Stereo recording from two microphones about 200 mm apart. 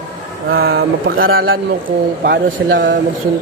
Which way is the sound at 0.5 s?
50° right (ahead or behind).